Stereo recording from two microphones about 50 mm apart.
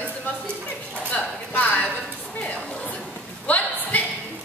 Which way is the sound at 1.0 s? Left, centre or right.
Left.